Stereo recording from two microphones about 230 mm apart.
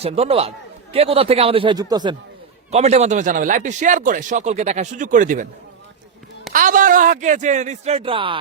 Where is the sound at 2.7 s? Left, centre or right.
Right.